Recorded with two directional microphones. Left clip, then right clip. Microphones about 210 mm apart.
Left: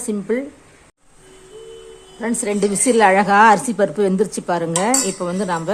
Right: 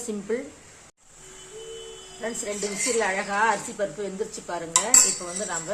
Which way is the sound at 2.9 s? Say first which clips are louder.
Left 13 dB; 45° left (ahead or behind).